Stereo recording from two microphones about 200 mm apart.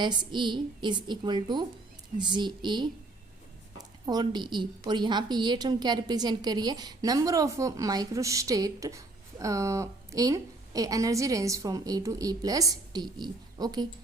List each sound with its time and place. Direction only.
0.0 s a woman's voice: 20° right (ahead or behind)